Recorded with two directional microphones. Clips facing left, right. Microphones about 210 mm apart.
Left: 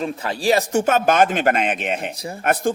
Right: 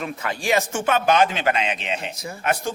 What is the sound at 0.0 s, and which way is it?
A man's voice, 30° left (ahead or behind).